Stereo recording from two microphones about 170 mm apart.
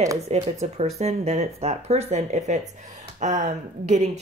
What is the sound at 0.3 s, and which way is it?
Speech, 40° right (ahead or behind).